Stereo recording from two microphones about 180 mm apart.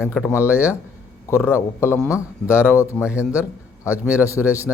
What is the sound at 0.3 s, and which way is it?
Speech, 10° right (ahead or behind).